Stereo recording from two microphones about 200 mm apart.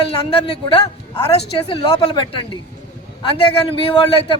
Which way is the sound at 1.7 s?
25° left (ahead or behind).